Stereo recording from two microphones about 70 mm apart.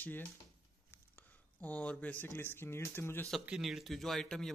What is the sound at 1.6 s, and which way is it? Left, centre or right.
Speech, centre.